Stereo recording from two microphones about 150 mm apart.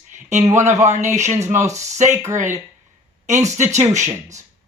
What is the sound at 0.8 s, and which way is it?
Speech, 50° right (ahead or behind).